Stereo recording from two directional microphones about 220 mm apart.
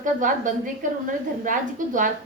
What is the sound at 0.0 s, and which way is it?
A woman's voice, 35° right (ahead or behind).